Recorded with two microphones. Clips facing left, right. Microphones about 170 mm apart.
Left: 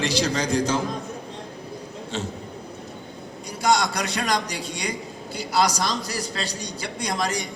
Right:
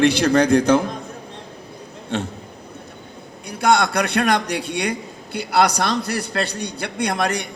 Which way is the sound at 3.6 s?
60° right (ahead or behind).